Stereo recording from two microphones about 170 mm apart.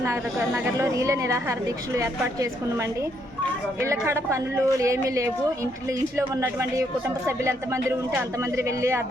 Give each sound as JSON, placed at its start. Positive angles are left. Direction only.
{"t": 0.0, "sound": "a woman's voice", "side_deg": -15}